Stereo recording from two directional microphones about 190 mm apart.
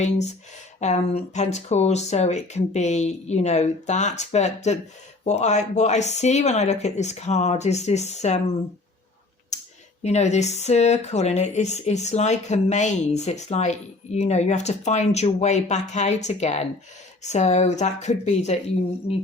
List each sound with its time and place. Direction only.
0.8 s speech: 35° left (ahead or behind)
9.5 s a sound: 35° left (ahead or behind)
10.0 s speech: 35° left (ahead or behind)